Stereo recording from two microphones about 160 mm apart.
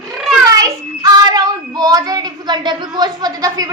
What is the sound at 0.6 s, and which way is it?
Child singing, 25° right (ahead or behind).